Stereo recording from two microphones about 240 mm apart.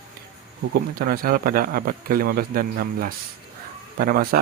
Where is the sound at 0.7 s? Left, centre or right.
Right.